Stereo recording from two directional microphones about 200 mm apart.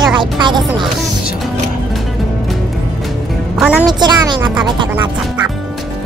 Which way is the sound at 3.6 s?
5° right (ahead or behind).